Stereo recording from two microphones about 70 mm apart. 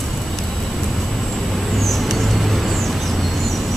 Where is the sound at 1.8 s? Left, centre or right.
Centre.